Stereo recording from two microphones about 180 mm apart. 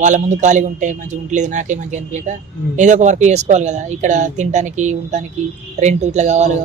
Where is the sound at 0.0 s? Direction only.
40° right (ahead or behind).